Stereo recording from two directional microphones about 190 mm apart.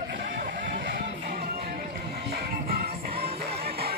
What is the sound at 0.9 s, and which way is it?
Music, 45° right (ahead or behind).